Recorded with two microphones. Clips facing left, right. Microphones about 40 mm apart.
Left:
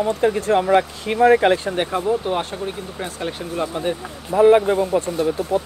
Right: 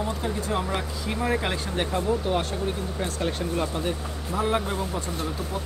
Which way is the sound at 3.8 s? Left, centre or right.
Left.